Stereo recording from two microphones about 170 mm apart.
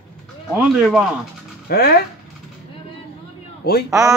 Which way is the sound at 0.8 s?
5° right (ahead or behind).